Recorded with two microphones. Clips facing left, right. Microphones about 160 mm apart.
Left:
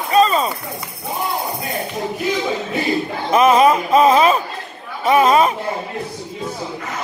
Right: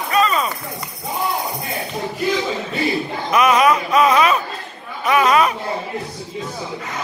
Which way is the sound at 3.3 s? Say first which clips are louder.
Left 3 dB; 30° left (ahead or behind).